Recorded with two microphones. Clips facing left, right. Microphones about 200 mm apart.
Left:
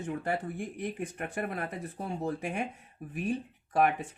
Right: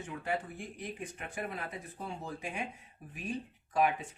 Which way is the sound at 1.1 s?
60° left (ahead or behind).